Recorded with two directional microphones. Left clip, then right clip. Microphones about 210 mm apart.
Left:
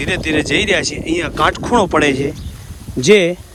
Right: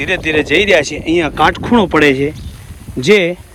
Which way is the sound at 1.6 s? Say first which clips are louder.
Right 2 dB; 25° left (ahead or behind).